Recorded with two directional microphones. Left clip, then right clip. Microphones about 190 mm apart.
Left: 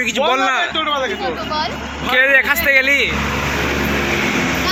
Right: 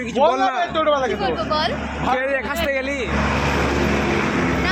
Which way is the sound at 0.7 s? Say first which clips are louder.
Even; 70° right (ahead or behind).